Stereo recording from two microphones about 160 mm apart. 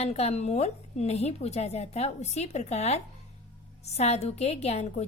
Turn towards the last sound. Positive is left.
turn(degrees=40)  # may be behind; listen again after turning